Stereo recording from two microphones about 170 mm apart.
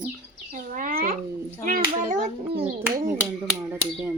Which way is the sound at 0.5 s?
50° right (ahead or behind).